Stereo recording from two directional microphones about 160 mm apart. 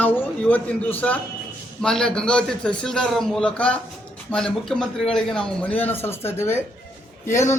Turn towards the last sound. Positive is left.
turn(degrees=15)  # may be behind; listen again after turning